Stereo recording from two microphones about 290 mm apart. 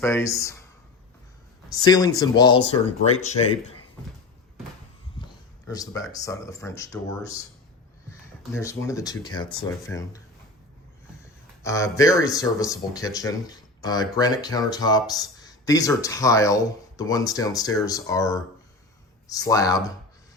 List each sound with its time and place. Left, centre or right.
0.0 s speech: centre
1.7 s speech: centre
5.2 s speech: centre
8.5 s speech: centre
11.6 s speech: centre